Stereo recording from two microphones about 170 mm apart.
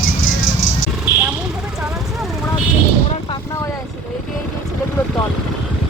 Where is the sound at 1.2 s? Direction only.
5° right (ahead or behind).